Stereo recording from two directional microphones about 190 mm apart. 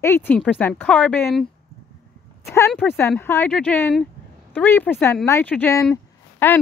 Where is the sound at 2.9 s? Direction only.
10° left (ahead or behind).